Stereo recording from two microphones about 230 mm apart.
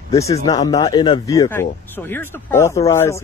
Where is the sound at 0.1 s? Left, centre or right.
Centre.